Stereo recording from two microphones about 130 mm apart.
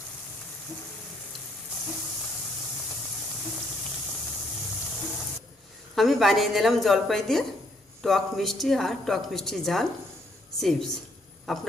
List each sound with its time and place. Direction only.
5.9 s a woman's voice: centre (ahead or behind)